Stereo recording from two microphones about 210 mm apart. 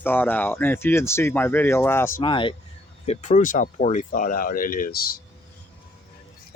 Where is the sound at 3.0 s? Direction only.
35° left (ahead or behind).